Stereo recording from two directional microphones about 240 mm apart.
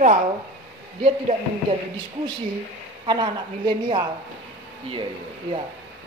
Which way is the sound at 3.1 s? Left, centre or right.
Centre.